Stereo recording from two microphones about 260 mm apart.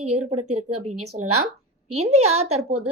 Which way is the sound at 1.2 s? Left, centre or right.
Right.